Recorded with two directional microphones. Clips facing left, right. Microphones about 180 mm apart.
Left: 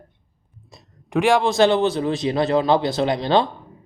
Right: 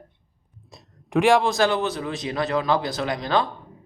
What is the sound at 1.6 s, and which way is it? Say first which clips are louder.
Speech: left 5 dB; 30° left (ahead or behind).